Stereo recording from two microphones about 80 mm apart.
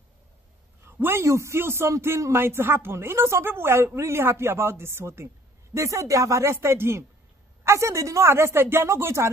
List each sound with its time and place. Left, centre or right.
0.8 s a man's voice: right